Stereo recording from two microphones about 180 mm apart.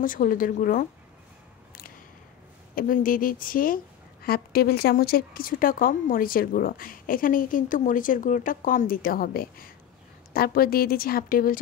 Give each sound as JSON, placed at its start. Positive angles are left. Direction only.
{"t": 0.0, "sound": "a woman's voice", "side_deg": 50}
{"t": 2.7, "sound": "a woman's voice", "side_deg": 50}